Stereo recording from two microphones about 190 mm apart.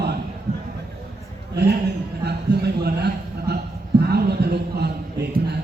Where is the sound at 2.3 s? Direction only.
60° right (ahead or behind).